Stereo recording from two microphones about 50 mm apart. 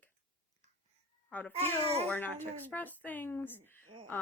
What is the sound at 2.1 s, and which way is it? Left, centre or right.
Speech, left.